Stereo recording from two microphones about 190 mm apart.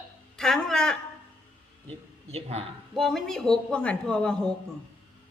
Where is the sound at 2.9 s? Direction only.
Centre (ahead or behind).